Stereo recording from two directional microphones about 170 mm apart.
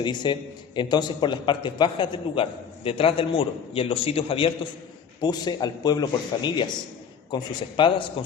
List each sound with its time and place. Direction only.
0.0 s a man's voice: 25° left (ahead or behind)